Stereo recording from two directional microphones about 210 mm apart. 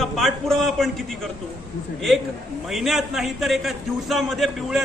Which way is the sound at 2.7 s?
Centre (ahead or behind).